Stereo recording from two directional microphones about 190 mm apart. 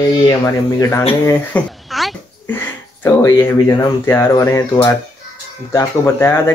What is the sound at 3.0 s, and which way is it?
Speech, 15° left (ahead or behind).